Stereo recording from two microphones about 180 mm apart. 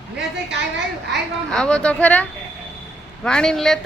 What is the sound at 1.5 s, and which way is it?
A woman's voice, 5° left (ahead or behind).